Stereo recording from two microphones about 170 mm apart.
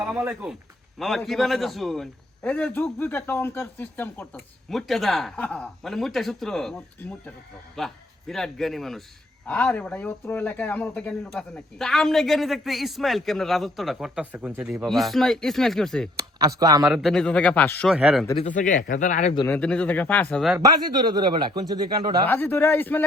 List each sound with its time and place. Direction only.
0.0 s speech: 5° right (ahead or behind)
16.4 s speech: 20° right (ahead or behind)
16.8 s speech: centre (ahead or behind)
17.9 s speech: 5° right (ahead or behind)
18.4 s speech: 50° left (ahead or behind)
19.5 s speech: 10° left (ahead or behind)
20.6 s speech: 25° right (ahead or behind)
22.3 s speech: 10° left (ahead or behind)